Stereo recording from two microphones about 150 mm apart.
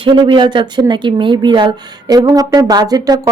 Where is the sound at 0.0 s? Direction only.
35° right (ahead or behind).